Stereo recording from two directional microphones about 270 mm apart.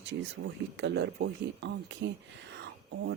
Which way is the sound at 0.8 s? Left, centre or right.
Right.